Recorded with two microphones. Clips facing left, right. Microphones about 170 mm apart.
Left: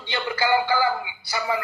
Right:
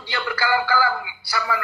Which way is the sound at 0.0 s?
20° left (ahead or behind).